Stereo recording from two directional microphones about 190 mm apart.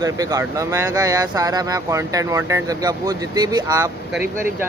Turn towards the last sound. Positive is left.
turn(degrees=-20)  # may be behind; listen again after turning